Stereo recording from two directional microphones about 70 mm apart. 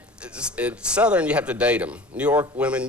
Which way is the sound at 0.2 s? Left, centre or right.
Centre.